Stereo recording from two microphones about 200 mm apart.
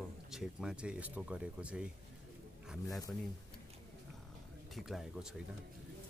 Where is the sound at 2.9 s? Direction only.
15° left (ahead or behind).